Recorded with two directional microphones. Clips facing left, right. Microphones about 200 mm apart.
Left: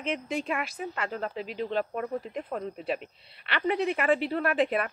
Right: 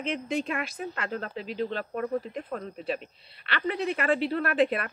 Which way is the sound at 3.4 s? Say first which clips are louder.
Left 2 dB; 15° left (ahead or behind).